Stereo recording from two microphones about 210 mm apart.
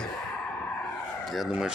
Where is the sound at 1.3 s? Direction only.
Centre (ahead or behind).